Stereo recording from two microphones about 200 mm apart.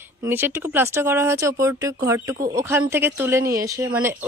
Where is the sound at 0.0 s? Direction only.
10° right (ahead or behind).